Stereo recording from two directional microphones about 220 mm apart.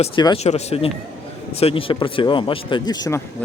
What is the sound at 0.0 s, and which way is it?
Speech, 25° left (ahead or behind).